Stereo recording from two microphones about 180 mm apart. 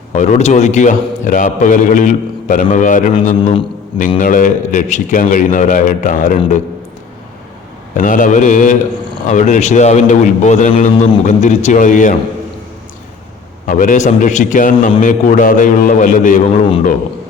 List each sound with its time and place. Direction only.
0.1 s a man's voice: 40° left (ahead or behind)
7.9 s a man's voice: 45° left (ahead or behind)
13.7 s a man's voice: 45° left (ahead or behind)